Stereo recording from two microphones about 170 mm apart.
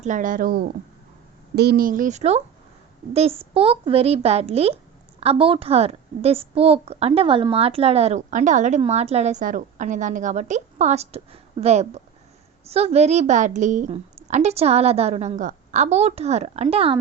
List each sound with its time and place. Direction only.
0.0 s a woman's voice: 50° right (ahead or behind); by 17.0 s 35° right (ahead or behind)